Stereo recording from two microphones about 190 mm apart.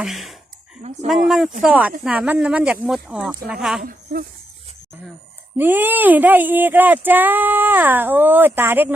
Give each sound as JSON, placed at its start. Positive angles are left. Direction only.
{"t": 0.0, "sound": "speech", "side_deg": 0}
{"t": 3.8, "sound": "speech", "side_deg": -50}
{"t": 5.5, "sound": "speech", "side_deg": -10}